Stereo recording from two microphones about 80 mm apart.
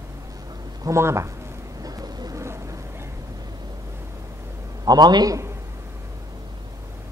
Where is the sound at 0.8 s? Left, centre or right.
Right.